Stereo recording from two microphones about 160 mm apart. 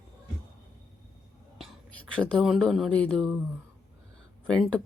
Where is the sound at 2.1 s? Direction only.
Centre (ahead or behind).